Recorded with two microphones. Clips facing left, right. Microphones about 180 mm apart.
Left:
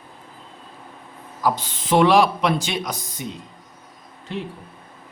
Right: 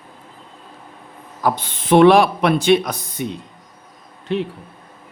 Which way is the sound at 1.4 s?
60° right (ahead or behind).